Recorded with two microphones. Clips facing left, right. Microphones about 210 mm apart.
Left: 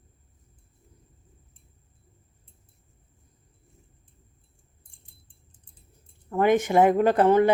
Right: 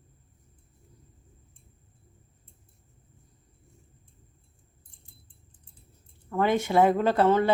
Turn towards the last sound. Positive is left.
turn(degrees=15)  # may be behind; listen again after turning